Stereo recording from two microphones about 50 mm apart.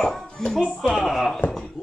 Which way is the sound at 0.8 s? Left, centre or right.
Centre.